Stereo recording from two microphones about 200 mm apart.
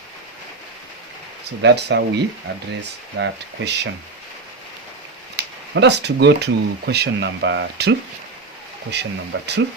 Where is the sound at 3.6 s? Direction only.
60° right (ahead or behind).